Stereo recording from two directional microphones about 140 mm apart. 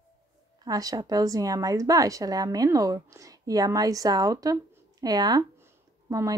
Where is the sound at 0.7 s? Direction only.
25° right (ahead or behind).